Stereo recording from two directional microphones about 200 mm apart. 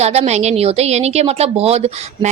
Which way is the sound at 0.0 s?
35° right (ahead or behind).